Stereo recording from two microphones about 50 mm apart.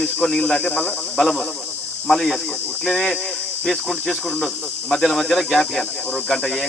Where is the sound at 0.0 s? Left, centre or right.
Centre.